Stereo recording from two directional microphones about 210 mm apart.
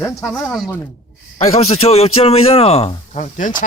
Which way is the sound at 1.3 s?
30° left (ahead or behind).